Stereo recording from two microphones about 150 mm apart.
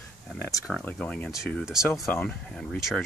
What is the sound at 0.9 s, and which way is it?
Speech, 5° left (ahead or behind).